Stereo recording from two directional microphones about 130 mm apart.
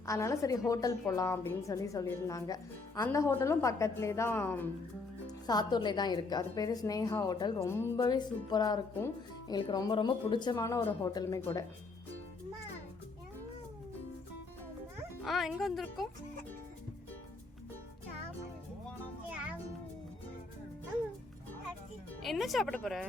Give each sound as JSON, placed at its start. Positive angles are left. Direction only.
{"t": 0.0, "sound": "a woman's voice", "side_deg": 25}
{"t": 5.5, "sound": "a woman's voice", "side_deg": 30}
{"t": 7.6, "sound": "speech", "side_deg": 20}
{"t": 7.9, "sound": "a woman's voice", "side_deg": 35}
{"t": 15.2, "sound": "speech", "side_deg": 0}
{"t": 22.2, "sound": "speech", "side_deg": 0}